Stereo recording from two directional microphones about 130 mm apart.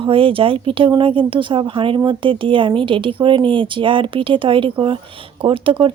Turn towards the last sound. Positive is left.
turn(degrees=-45)  # may be behind; listen again after turning